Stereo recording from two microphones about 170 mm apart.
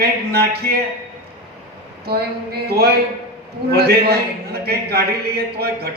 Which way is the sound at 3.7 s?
70° right (ahead or behind).